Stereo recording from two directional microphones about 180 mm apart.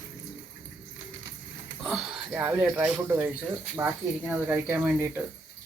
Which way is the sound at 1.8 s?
5° right (ahead or behind).